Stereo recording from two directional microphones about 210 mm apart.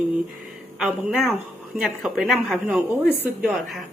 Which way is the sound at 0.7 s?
Centre (ahead or behind).